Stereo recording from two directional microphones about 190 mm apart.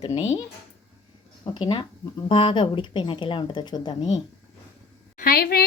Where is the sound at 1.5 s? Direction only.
25° left (ahead or behind).